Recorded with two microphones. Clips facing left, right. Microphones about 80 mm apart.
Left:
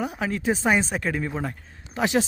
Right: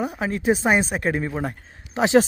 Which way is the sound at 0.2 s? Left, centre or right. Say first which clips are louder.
Right 2 dB; right.